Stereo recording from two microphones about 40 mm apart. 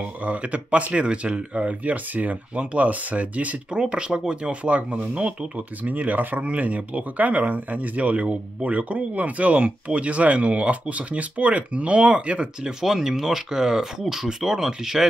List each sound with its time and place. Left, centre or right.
0.2 s speech: right
3.9 s speech: right
12.8 s speech: centre